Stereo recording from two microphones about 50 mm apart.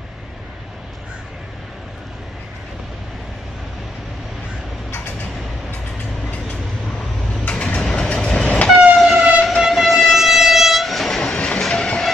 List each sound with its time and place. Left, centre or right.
7.4 s train: left
8.9 s train: centre
11.2 s a sound: left
11.7 s train: centre